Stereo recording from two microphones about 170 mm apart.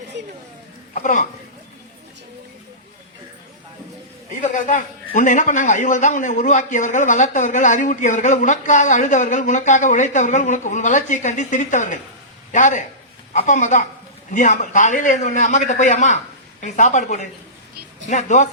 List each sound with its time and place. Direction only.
0.1 s a sound: 90° right
0.9 s a man's voice: 45° left (ahead or behind)
4.4 s a man's voice: 50° left (ahead or behind)